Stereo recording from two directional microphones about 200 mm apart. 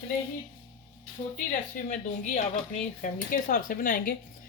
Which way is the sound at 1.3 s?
40° left (ahead or behind).